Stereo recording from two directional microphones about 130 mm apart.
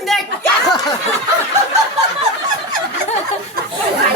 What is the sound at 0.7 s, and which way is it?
Snicker, 30° left (ahead or behind).